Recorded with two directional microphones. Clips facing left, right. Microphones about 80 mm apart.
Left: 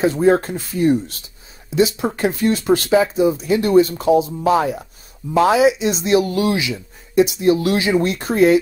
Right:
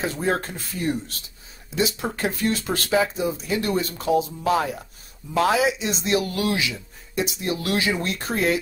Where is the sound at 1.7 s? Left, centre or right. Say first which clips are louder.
Left 8 dB; centre.